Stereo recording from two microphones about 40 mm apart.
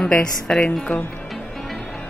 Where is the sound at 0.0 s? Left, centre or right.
Centre.